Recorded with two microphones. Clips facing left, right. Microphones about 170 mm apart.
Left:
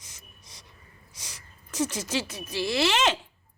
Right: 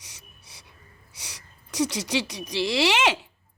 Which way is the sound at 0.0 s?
10° right (ahead or behind).